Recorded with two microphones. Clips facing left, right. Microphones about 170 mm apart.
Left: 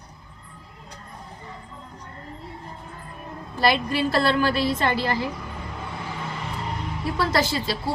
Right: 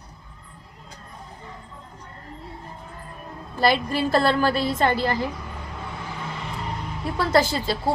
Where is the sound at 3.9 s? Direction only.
45° right (ahead or behind).